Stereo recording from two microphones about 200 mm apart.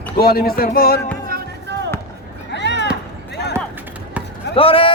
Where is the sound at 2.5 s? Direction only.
60° left (ahead or behind).